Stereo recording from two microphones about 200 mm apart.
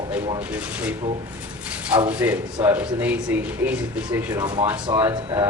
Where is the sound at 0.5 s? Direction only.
5° right (ahead or behind).